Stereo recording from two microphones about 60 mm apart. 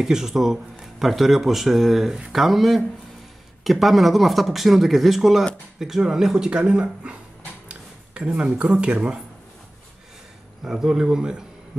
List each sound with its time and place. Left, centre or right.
0.0 s speech: centre
10.6 s speech: centre